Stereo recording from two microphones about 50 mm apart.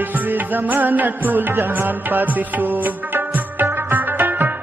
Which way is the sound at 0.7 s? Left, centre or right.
Right.